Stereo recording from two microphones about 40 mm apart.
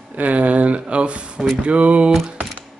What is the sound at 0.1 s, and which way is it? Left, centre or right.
Speech, right.